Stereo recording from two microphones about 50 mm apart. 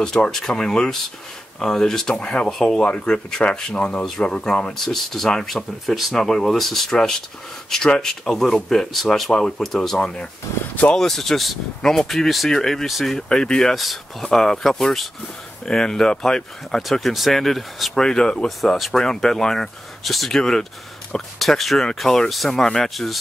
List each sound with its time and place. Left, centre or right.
0.0 s speech: centre
2.1 s speech: left
4.7 s speech: centre
16.9 s speech: centre
17.9 s speech: centre
18.6 s speech: centre